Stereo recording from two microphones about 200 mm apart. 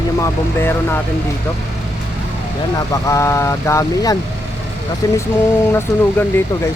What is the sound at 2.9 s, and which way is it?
Speech, 15° left (ahead or behind).